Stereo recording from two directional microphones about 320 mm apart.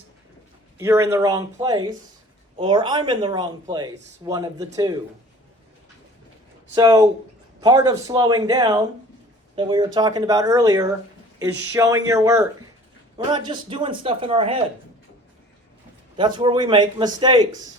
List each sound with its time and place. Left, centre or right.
0.8 s speech: centre
6.7 s speech: centre
16.1 s speech: centre